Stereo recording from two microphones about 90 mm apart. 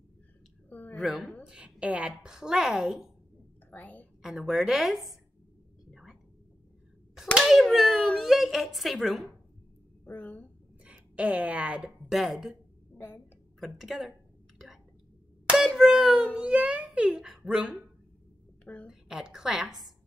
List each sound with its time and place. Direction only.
0.7 s a sound: 20° left (ahead or behind)
0.9 s a woman's voice: 5° right (ahead or behind)
3.7 s a woman's voice: 20° left (ahead or behind)
4.2 s a woman's voice: 5° right (ahead or behind)
7.3 s a child's voice: 5° right (ahead or behind)
10.0 s speech: 20° left (ahead or behind)
10.8 s speech: 15° right (ahead or behind)
12.1 s a woman's voice: 5° right (ahead or behind)
12.9 s a sound: 20° left (ahead or behind)
13.6 s a woman's voice: 5° right (ahead or behind)
15.4 s a sound: 5° right (ahead or behind)
15.8 s a child's voice: 5° right (ahead or behind)
18.6 s a sound: 15° left (ahead or behind)
18.9 s a woman's voice: 10° right (ahead or behind)